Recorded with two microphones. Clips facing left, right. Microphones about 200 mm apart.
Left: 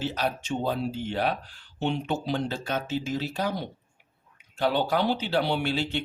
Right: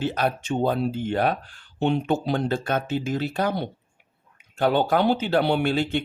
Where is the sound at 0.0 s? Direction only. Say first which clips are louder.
Right 4 dB; 55° right (ahead or behind).